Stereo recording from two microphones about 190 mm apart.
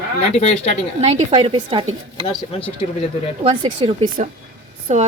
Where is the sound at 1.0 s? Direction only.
35° right (ahead or behind).